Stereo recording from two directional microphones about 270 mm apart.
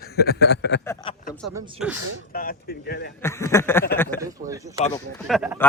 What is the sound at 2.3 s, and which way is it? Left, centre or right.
Speech, left.